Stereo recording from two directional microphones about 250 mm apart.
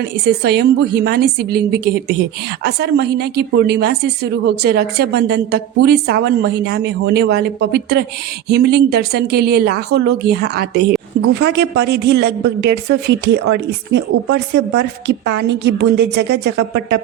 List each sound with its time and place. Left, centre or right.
0.0 s a woman's voice: right